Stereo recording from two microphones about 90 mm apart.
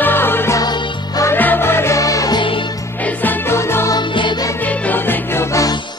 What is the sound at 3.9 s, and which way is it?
Music, 55° left (ahead or behind).